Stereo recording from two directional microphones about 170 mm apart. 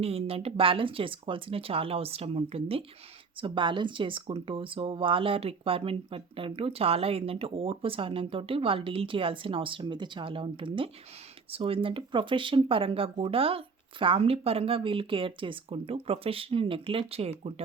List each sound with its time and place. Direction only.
0.0 s speech: 35° right (ahead or behind)